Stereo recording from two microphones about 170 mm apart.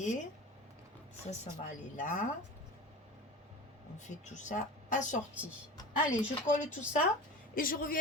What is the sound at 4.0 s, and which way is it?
Speech, 45° left (ahead or behind).